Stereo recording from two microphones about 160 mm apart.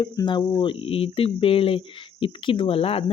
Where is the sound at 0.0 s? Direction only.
30° left (ahead or behind).